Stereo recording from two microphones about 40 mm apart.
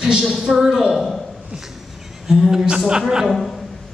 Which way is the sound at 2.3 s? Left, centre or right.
Centre.